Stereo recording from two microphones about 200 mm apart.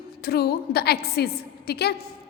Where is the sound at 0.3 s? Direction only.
55° left (ahead or behind).